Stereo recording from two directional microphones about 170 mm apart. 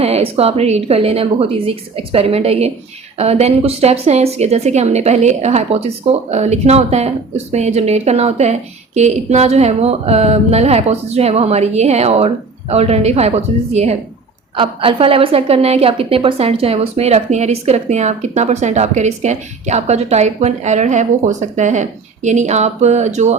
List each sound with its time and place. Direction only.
0.0 s a woman's voice: 35° right (ahead or behind)